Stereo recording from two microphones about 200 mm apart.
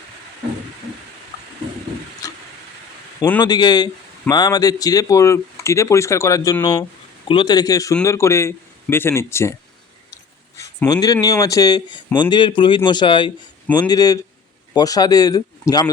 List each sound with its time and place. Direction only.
2.2 s vehicle: 15° left (ahead or behind)
3.2 s a man's voice: 10° left (ahead or behind)
3.4 s speech: 20° left (ahead or behind)
10.6 s speech: 15° left (ahead or behind)